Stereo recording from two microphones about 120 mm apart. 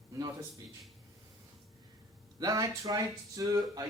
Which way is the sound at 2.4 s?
30° right (ahead or behind).